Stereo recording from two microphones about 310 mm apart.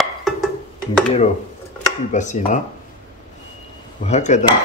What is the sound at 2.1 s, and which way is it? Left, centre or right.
Speech, left.